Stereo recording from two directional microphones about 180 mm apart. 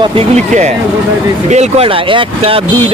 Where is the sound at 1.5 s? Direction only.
35° right (ahead or behind).